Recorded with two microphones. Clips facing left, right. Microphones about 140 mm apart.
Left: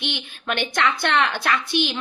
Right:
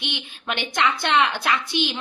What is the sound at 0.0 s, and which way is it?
A woman's voice, 15° right (ahead or behind).